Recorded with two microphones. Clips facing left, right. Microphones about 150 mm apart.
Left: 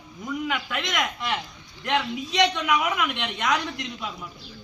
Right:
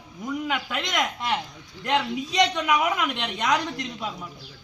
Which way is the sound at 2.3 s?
40° right (ahead or behind).